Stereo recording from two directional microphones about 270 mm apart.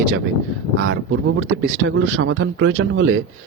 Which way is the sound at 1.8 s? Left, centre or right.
Right.